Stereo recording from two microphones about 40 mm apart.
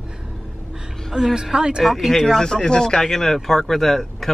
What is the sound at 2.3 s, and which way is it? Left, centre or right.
Speech, centre.